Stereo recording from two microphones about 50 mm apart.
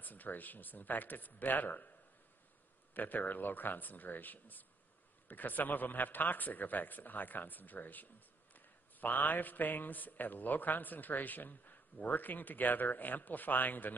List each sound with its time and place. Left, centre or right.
0.0 s a man's voice: left